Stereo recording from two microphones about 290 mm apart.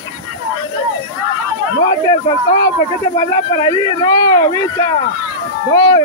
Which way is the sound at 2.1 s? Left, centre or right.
Centre.